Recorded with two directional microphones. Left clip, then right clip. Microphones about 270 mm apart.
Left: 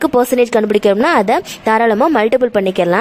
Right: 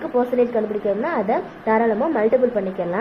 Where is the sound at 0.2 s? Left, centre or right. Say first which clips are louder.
Left 5 dB; left.